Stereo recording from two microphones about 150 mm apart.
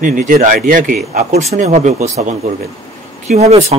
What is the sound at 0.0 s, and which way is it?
Speech, 60° right (ahead or behind).